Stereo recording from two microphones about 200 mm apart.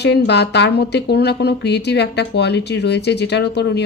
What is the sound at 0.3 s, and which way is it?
A woman's voice, 60° left (ahead or behind).